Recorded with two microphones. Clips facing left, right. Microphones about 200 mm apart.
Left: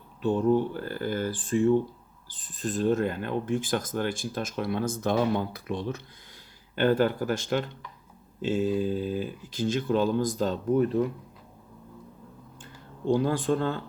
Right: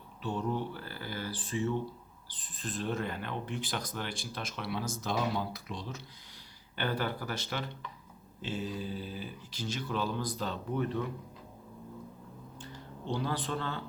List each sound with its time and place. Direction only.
0.2 s speech: 50° left (ahead or behind)
6.8 s speech: 45° left (ahead or behind)
12.6 s speech: 45° left (ahead or behind)